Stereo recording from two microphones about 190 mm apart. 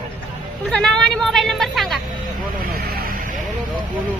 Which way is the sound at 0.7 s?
5° left (ahead or behind).